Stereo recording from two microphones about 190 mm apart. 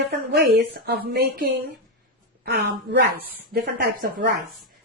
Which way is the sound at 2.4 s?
60° right (ahead or behind).